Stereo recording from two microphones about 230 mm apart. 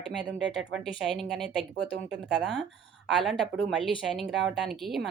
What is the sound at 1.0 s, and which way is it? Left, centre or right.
A woman's voice, centre.